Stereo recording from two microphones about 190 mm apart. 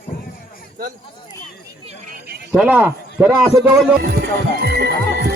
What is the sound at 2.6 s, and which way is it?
Speech, 10° right (ahead or behind).